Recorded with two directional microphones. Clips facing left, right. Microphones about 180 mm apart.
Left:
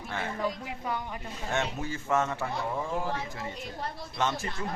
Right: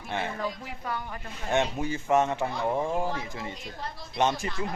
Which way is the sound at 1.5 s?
20° right (ahead or behind).